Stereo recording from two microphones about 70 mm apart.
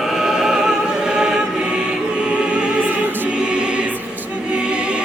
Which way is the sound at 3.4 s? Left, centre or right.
Centre.